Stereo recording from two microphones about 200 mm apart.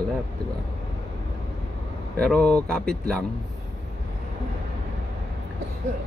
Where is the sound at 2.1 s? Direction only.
5° left (ahead or behind).